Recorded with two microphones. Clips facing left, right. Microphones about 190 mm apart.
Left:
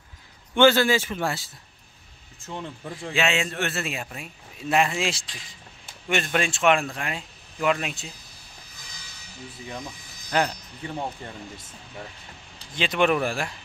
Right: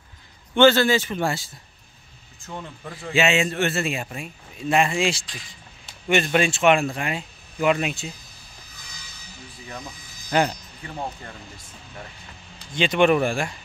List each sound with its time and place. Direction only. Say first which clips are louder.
0.6 s a man's voice: right 2 dB; 10° left (ahead or behind)
10.3 s a man's voice: right 3 dB; 5° right (ahead or behind)
12.7 s a man's voice: right 4 dB; centre (ahead or behind)